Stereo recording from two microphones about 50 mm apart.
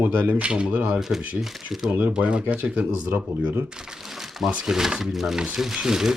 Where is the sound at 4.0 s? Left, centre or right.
Centre.